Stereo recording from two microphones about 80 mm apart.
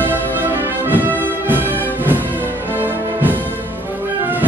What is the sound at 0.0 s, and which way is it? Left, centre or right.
Music, right.